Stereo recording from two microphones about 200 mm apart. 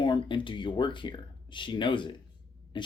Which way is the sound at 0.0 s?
25° left (ahead or behind).